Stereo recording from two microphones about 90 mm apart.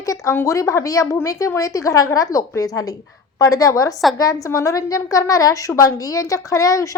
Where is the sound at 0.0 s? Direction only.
40° left (ahead or behind).